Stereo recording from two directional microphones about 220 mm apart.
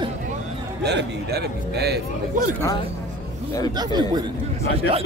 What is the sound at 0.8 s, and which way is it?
A man's voice, 50° right (ahead or behind).